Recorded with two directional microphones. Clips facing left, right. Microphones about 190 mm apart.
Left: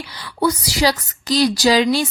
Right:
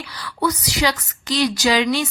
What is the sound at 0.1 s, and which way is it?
A woman's voice, 25° left (ahead or behind).